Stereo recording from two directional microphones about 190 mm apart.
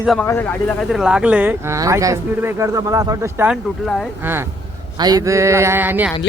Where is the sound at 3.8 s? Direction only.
Centre (ahead or behind).